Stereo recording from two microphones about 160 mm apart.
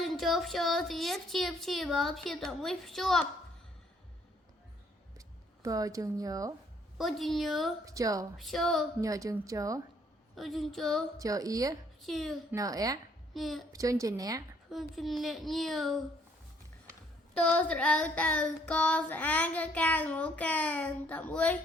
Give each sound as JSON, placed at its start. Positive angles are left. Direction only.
{"t": 0.0, "sound": "a woman's voice", "side_deg": 0}
{"t": 5.6, "sound": "speech", "side_deg": -20}
{"t": 7.0, "sound": "a woman's voice", "side_deg": 0}
{"t": 7.9, "sound": "speech", "side_deg": -20}
{"t": 8.4, "sound": "a woman's voice", "side_deg": 0}
{"t": 9.0, "sound": "speech", "side_deg": -20}
{"t": 10.3, "sound": "a woman's voice", "side_deg": 0}
{"t": 11.2, "sound": "speech", "side_deg": -20}
{"t": 12.0, "sound": "a woman's voice", "side_deg": 0}
{"t": 12.5, "sound": "speech", "side_deg": -20}
{"t": 13.3, "sound": "a woman's voice", "side_deg": 0}
{"t": 13.7, "sound": "speech", "side_deg": -20}
{"t": 14.7, "sound": "a woman's voice", "side_deg": 0}
{"t": 17.3, "sound": "child singing", "side_deg": 10}